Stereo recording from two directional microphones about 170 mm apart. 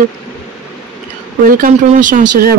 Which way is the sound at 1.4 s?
50° right (ahead or behind).